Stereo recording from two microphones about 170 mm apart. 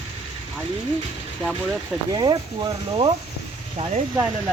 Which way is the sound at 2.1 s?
25° right (ahead or behind).